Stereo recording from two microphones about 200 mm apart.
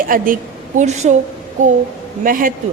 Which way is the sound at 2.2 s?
45° right (ahead or behind).